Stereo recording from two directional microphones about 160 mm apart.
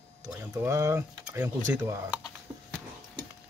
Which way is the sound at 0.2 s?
15° right (ahead or behind).